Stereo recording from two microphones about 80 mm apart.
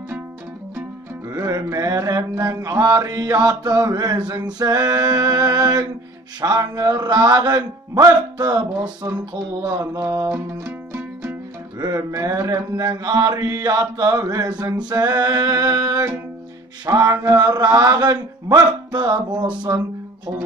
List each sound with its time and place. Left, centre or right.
1.3 s music: right
1.8 s mantra: right
6.4 s speech: right
9.6 s mantra: right
10.3 s music: right
11.8 s mantra: right